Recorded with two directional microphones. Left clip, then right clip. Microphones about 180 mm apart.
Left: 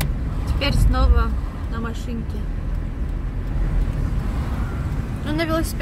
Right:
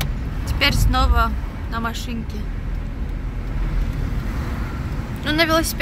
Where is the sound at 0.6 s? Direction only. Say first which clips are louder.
Right 5 dB; 5° right (ahead or behind).